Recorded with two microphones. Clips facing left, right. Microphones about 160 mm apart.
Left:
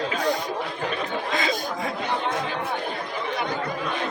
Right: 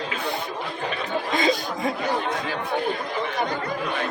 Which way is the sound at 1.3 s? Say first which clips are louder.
Right 5 dB; 25° right (ahead or behind).